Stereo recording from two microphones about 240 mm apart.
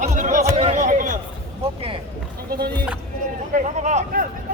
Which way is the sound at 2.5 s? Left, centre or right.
Right.